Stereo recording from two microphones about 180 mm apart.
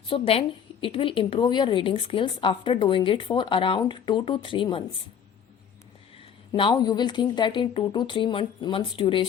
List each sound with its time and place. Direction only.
0.1 s a woman's voice: 30° left (ahead or behind)
6.5 s a woman's voice: 25° left (ahead or behind)